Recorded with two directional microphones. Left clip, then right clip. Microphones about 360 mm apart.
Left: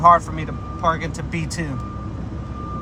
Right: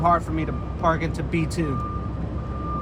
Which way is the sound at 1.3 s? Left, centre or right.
Centre.